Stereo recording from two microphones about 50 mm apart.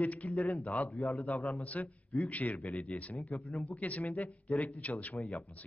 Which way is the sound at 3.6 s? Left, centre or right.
Left.